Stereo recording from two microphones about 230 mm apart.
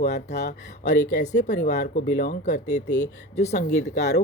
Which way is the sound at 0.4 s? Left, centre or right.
Left.